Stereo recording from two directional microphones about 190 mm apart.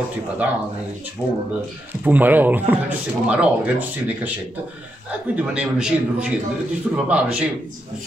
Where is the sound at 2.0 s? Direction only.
10° right (ahead or behind).